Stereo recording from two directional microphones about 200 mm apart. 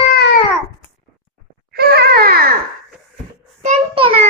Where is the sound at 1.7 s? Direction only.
50° right (ahead or behind).